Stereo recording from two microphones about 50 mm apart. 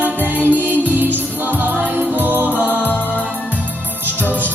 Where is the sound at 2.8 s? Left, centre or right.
Left.